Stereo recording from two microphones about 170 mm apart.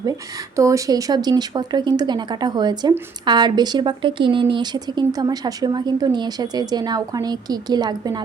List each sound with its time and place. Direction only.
0.0 s speech: 20° right (ahead or behind)